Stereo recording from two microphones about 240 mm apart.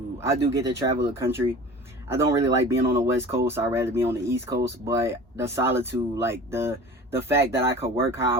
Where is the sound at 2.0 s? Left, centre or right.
Centre.